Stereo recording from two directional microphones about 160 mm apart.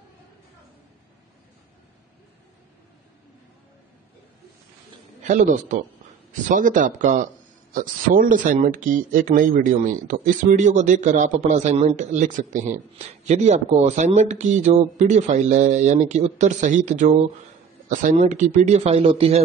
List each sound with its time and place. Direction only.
5.2 s speech: 50° right (ahead or behind)